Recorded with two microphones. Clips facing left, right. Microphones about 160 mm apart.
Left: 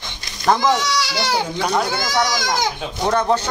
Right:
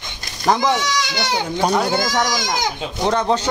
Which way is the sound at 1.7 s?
15° right (ahead or behind).